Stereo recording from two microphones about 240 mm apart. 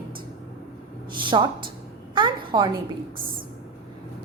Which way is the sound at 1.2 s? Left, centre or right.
Centre.